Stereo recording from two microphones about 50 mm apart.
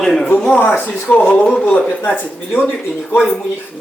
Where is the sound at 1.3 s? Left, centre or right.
Left.